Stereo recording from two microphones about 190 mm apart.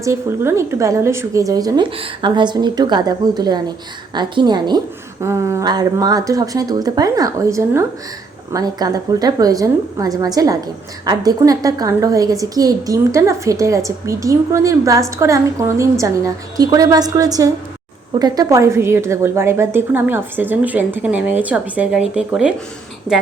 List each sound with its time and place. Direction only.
0.0 s a woman's voice: 15° right (ahead or behind)